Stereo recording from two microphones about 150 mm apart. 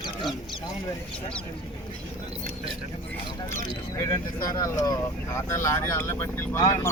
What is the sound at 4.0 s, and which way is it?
Speech, 20° left (ahead or behind).